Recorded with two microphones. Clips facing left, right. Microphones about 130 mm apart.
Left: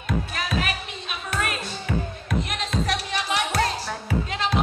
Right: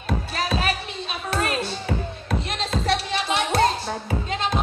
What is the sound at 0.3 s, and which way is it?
Music, 30° right (ahead or behind).